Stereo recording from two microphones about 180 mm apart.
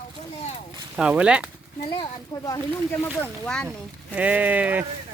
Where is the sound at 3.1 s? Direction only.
5° left (ahead or behind).